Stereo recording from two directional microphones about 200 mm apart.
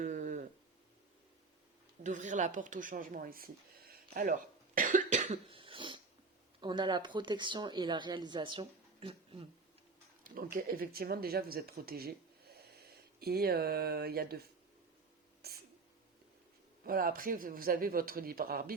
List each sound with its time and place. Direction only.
0.0 s a sound: 40° right (ahead or behind)
2.0 s speech: 40° right (ahead or behind)
3.9 s cough: 45° right (ahead or behind); by 6.0 s 25° right (ahead or behind)
6.6 s speech: 25° right (ahead or behind)
10.2 s speech: 45° right (ahead or behind)
15.4 s sneeze: 50° right (ahead or behind)
16.8 s speech: 45° right (ahead or behind)